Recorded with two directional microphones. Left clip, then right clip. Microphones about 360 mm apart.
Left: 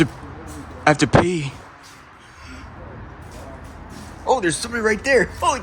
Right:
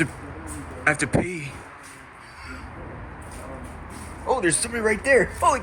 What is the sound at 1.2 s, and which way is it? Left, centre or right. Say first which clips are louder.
Speech: left 9 dB; left.